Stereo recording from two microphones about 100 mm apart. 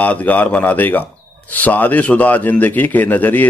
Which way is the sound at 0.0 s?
15° left (ahead or behind).